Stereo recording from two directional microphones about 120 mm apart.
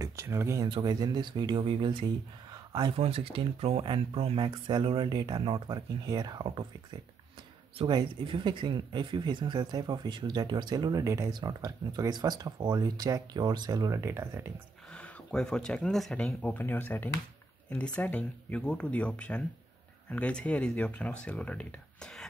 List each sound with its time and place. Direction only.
0.0 s speech: 25° right (ahead or behind)
0.7 s speech: 40° right (ahead or behind)
2.5 s a sound: 35° right (ahead or behind)
3.0 s speech: 50° right (ahead or behind)
7.9 s speech: 40° right (ahead or behind); by 14.5 s 20° right (ahead or behind)
14.9 s speech: 5° left (ahead or behind)